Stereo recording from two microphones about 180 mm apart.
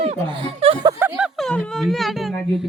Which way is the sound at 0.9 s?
10° right (ahead or behind).